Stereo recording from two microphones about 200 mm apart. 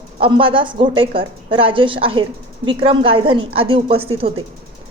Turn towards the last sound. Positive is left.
turn(degrees=-25)  # may be behind; listen again after turning